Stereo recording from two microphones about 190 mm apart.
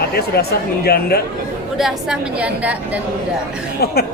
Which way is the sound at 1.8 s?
5° right (ahead or behind).